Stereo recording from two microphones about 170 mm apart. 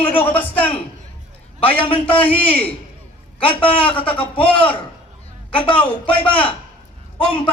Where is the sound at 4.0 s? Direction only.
30° left (ahead or behind).